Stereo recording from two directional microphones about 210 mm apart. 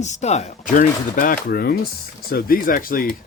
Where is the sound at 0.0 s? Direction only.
35° left (ahead or behind).